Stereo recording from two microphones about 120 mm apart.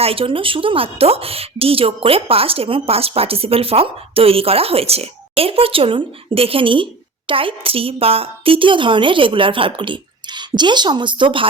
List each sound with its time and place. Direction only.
0.0 s a woman's voice: 50° right (ahead or behind)